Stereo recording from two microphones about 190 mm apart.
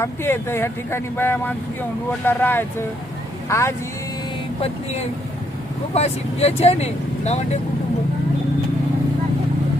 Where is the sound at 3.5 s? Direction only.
15° left (ahead or behind).